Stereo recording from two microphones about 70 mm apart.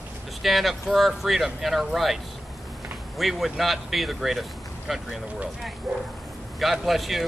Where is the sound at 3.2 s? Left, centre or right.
Centre.